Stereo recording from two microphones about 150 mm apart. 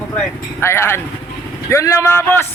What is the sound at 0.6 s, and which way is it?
A man's voice, 15° left (ahead or behind).